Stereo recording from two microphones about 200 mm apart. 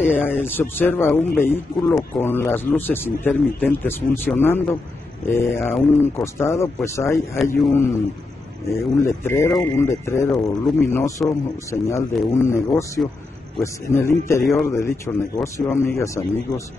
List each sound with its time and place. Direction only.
0.1 s a man's voice: 10° left (ahead or behind)
9.0 s a man's voice: 10° left (ahead or behind)